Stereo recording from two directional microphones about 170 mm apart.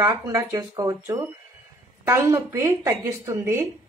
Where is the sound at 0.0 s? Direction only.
20° right (ahead or behind).